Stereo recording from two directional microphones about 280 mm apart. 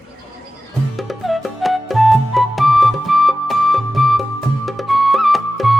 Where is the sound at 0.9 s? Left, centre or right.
Centre.